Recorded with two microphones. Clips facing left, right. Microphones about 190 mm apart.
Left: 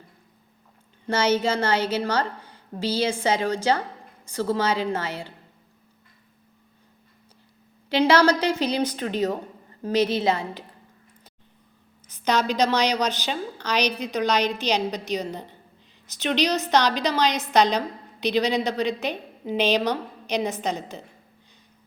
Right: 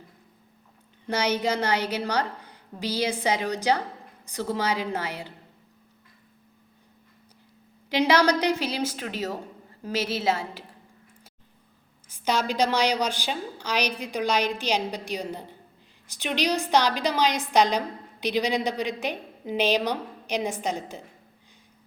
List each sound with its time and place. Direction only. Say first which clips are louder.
1.0 s a woman's voice: left 3 dB; 15° right (ahead or behind)
7.9 s a woman's voice: left 3 dB; 15° right (ahead or behind)
12.0 s a woman's voice: left 3 dB; 10° right (ahead or behind)